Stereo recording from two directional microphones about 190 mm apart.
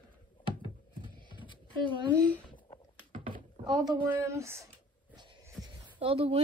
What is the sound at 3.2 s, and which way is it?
Speech, 25° right (ahead or behind).